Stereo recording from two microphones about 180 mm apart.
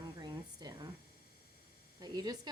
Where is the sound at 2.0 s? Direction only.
20° right (ahead or behind).